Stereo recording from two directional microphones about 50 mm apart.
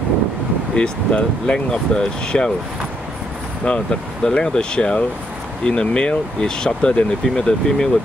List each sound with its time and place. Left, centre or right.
0.7 s speech: centre
3.6 s speech: centre